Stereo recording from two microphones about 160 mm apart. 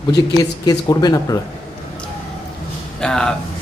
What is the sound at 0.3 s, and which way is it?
Speech, 25° left (ahead or behind).